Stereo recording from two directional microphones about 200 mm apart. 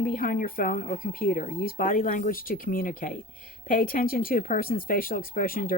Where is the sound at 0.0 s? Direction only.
45° left (ahead or behind).